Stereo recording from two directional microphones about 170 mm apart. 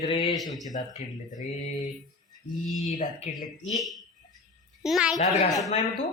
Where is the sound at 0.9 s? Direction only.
50° left (ahead or behind).